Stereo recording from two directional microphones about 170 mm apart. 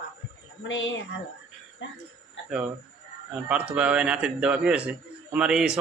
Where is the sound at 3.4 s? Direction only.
10° right (ahead or behind).